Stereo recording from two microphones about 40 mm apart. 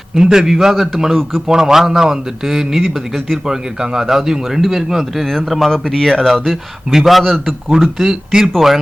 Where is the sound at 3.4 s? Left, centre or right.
Centre.